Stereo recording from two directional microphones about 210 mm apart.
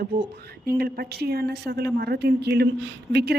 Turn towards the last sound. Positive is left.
turn(degrees=-50)  # may be behind; listen again after turning